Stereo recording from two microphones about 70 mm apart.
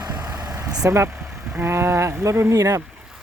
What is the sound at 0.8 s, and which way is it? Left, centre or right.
Speech, right.